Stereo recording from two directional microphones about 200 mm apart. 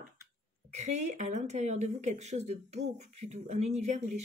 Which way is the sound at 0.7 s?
35° right (ahead or behind).